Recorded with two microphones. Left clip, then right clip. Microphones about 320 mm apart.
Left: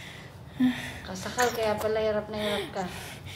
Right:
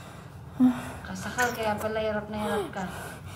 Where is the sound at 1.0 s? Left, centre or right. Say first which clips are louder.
Left 1 dB; centre.